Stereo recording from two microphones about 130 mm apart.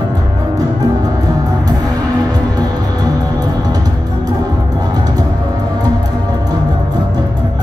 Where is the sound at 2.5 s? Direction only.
30° right (ahead or behind).